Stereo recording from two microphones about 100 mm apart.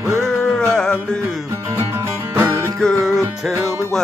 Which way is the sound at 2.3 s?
20° right (ahead or behind).